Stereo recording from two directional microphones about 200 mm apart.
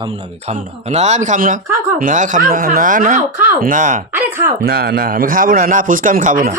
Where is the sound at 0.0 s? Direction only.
25° right (ahead or behind).